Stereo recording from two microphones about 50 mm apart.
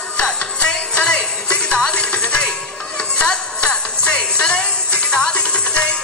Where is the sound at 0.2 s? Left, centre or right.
Centre.